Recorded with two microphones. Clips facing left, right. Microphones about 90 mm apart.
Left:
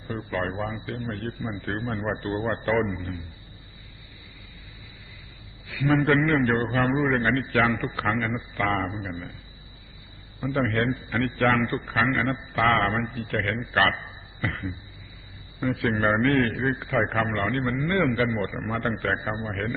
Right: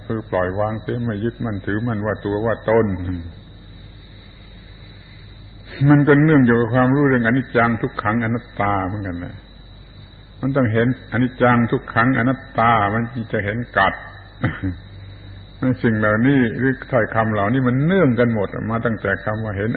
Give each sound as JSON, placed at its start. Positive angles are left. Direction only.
{"t": 0.1, "sound": "a man's voice", "side_deg": -35}
{"t": 5.6, "sound": "a sound", "side_deg": -35}
{"t": 6.0, "sound": "a man's voice", "side_deg": -40}
{"t": 10.4, "sound": "a man's voice", "side_deg": -30}
{"t": 15.7, "sound": "a man's voice", "side_deg": -30}